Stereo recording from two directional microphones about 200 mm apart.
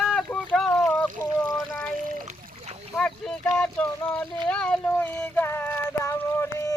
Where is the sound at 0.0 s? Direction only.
Centre (ahead or behind).